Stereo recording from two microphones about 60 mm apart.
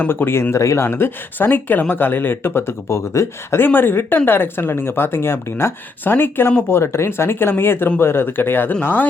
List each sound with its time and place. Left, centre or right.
0.1 s speech: left
0.5 s speech: left
0.9 s speech: left
3.6 s speech: left
6.7 s speech: left